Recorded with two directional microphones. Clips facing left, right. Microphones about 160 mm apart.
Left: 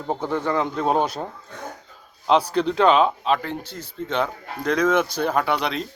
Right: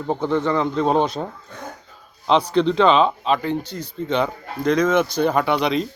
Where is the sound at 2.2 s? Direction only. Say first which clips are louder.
Right 2 dB; 5° left (ahead or behind).